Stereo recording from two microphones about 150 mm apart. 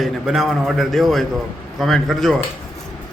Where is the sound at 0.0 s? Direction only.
Centre (ahead or behind).